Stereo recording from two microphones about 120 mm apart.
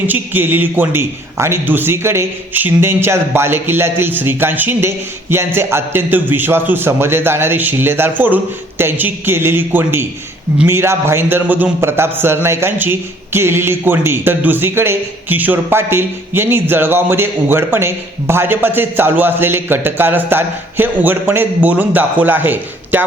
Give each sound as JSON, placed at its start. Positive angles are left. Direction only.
{"t": 0.1, "sound": "a man's voice", "side_deg": -15}